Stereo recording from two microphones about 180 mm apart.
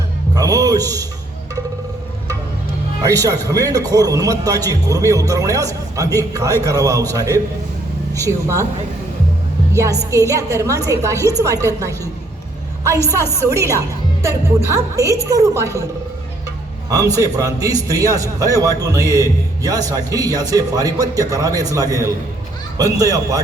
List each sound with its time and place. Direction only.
0.3 s speech: 20° right (ahead or behind)
3.0 s a man's voice: 20° right (ahead or behind)
9.7 s a woman's voice: 15° right (ahead or behind)
17.2 s a man's voice: 20° right (ahead or behind)